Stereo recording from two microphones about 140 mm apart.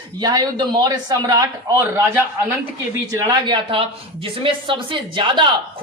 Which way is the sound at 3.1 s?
25° right (ahead or behind).